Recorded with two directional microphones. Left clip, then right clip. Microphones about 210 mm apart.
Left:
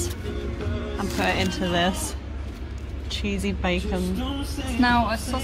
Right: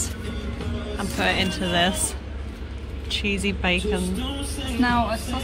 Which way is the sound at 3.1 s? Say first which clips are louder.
Right 4 dB; centre (ahead or behind).